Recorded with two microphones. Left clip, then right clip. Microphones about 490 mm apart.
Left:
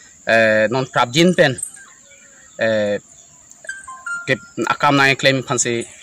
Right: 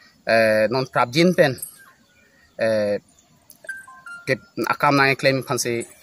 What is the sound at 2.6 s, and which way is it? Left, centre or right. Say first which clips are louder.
Speech: left 3 dB; right.